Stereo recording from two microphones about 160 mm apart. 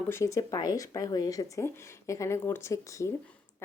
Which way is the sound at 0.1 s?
20° left (ahead or behind).